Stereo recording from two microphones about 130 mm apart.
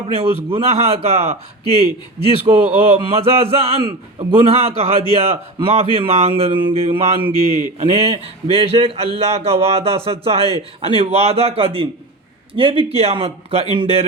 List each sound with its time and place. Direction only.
0.1 s a man's voice: 50° right (ahead or behind)